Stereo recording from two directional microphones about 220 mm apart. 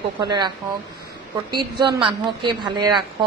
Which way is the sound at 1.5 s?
20° right (ahead or behind).